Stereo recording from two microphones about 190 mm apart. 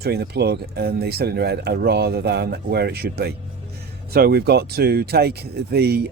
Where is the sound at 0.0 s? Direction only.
55° right (ahead or behind).